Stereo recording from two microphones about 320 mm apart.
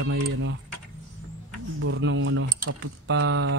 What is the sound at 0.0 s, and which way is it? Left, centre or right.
Speech, right.